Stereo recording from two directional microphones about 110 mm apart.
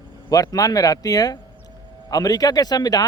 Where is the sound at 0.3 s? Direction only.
35° left (ahead or behind).